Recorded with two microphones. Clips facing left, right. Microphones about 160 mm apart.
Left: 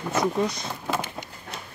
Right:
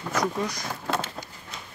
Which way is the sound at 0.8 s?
10° left (ahead or behind).